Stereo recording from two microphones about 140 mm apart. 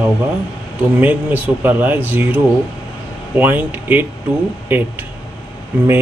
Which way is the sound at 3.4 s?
15° right (ahead or behind).